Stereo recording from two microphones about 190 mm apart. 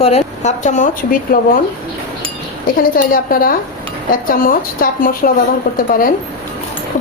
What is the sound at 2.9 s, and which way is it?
A woman's voice, 50° left (ahead or behind).